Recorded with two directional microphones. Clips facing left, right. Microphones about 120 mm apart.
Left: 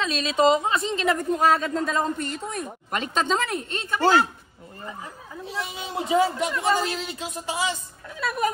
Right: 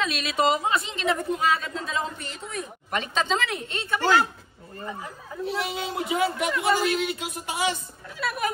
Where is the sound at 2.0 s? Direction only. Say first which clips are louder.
Left 6 dB; 55° left (ahead or behind).